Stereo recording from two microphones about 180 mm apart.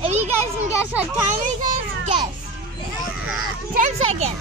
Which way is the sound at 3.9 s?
35° right (ahead or behind).